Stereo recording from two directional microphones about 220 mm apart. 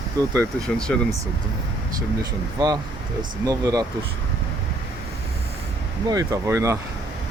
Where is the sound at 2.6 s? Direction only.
20° right (ahead or behind).